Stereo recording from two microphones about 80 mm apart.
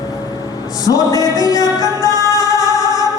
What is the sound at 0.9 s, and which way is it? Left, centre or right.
Music, left.